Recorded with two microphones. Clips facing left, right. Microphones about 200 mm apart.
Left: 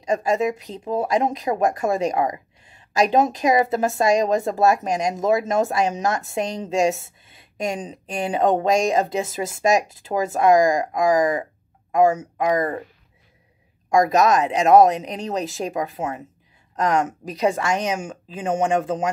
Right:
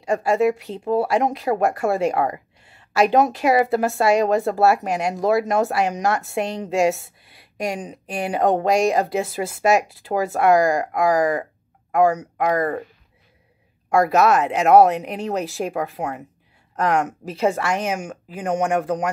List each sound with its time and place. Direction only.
0.0 s speech: 20° left (ahead or behind)
13.9 s speech: 15° left (ahead or behind)
17.3 s speech: 15° left (ahead or behind)